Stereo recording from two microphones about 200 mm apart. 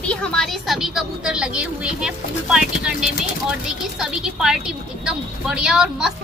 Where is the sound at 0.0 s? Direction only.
5° left (ahead or behind).